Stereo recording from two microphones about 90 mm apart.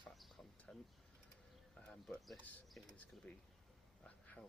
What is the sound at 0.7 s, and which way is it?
Speech, 10° left (ahead or behind).